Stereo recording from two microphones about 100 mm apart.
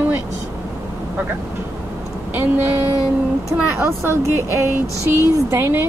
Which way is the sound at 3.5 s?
25° right (ahead or behind).